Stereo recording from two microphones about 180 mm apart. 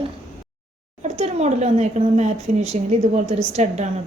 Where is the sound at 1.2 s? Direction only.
40° right (ahead or behind).